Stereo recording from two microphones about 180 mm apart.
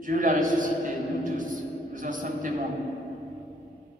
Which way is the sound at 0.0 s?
50° right (ahead or behind).